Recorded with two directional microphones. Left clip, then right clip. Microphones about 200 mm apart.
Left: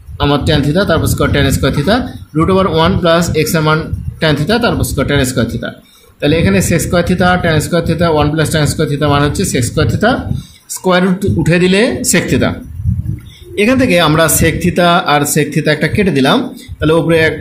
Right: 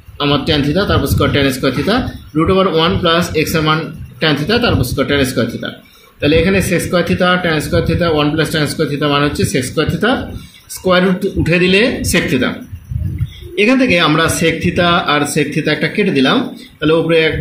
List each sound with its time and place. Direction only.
0.2 s speech: 65° left (ahead or behind)
13.6 s speech: 65° left (ahead or behind)